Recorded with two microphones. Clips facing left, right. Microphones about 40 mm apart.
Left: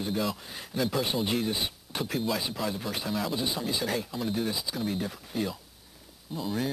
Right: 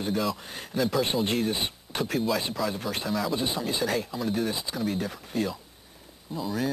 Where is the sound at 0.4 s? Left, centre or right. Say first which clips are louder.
Right 2 dB; centre.